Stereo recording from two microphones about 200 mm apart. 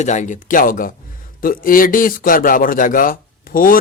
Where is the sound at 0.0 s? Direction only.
35° left (ahead or behind).